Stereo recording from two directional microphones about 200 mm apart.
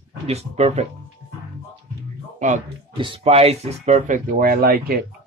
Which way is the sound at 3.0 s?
30° right (ahead or behind).